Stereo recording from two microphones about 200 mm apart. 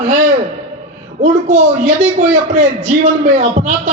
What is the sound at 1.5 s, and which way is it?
A man's voice, 35° right (ahead or behind).